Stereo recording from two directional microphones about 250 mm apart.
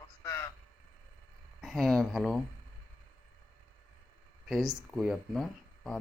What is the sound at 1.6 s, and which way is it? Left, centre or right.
Speech, centre.